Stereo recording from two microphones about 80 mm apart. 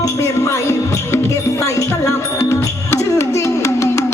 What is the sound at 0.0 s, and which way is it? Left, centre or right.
Music, left.